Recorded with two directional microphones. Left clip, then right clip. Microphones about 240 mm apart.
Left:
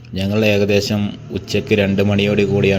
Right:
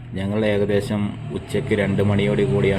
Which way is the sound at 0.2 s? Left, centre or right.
Left.